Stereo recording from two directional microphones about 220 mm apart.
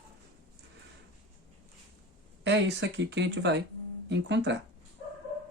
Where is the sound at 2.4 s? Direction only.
55° right (ahead or behind).